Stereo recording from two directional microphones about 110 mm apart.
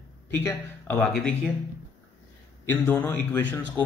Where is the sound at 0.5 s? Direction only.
20° left (ahead or behind).